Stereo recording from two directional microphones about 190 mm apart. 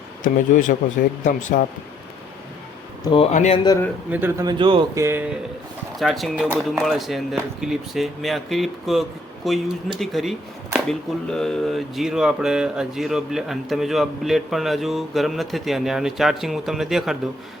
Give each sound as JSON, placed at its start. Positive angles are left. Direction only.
{"t": 0.2, "sound": "speech", "side_deg": 45}
{"t": 3.0, "sound": "speech", "side_deg": 25}
{"t": 3.3, "sound": "speech", "side_deg": 35}
{"t": 4.1, "sound": "speech", "side_deg": -10}
{"t": 4.4, "sound": "speech", "side_deg": -25}
{"t": 6.0, "sound": "speech", "side_deg": 0}